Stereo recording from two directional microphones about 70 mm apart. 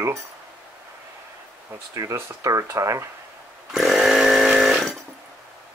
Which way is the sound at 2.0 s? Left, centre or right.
Right.